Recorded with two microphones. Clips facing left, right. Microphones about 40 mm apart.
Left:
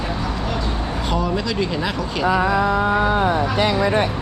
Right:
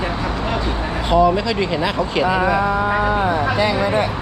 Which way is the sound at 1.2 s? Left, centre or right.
Centre.